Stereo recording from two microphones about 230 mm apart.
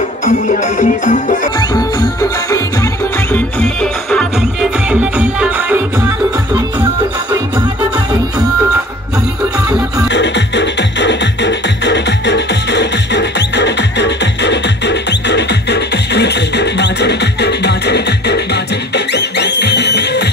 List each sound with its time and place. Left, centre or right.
0.2 s music: left
1.6 s music: centre
3.3 s music: centre
9.7 s music: centre
10.0 s music: left